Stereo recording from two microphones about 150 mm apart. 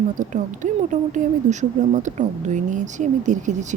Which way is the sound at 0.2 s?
55° right (ahead or behind).